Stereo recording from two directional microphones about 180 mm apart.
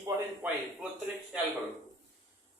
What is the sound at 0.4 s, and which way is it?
Speech, 10° right (ahead or behind).